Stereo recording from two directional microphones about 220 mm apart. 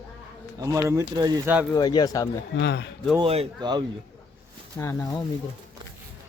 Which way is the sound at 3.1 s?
25° right (ahead or behind).